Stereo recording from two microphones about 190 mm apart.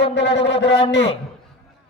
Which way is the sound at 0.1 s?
70° left (ahead or behind).